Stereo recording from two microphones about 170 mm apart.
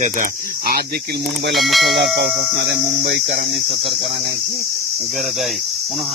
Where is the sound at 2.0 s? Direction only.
90° right.